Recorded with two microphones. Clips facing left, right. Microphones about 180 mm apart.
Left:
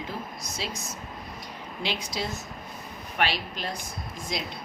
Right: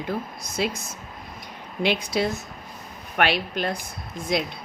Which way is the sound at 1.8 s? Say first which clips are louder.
Right 9 dB; 60° right (ahead or behind).